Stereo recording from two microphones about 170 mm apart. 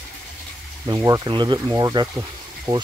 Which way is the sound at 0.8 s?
20° right (ahead or behind).